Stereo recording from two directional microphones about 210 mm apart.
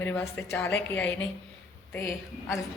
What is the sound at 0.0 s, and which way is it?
A woman's voice, 10° left (ahead or behind).